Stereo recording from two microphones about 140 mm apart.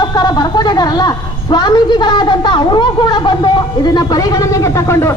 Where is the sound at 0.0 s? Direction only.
30° left (ahead or behind).